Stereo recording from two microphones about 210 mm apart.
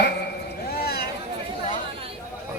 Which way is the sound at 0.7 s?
45° left (ahead or behind).